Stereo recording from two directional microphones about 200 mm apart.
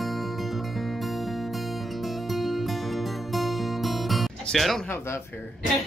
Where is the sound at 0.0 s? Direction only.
Centre (ahead or behind).